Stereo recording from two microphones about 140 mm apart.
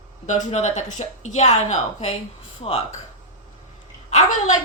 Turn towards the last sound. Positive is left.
turn(degrees=55)  # may be behind; listen again after turning